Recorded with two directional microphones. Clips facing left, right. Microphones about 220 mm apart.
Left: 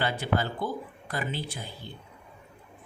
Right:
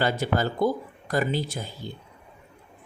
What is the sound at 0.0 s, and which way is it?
Speech, 40° right (ahead or behind).